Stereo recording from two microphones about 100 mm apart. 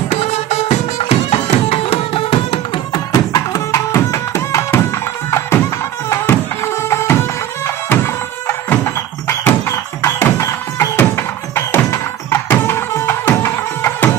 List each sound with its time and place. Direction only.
0.2 s music: 90° left; by 3.0 s 65° left (ahead or behind)
3.1 s music: 35° left (ahead or behind)